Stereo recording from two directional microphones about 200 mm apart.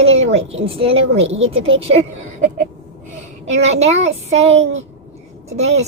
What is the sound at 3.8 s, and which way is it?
Speech, 35° right (ahead or behind).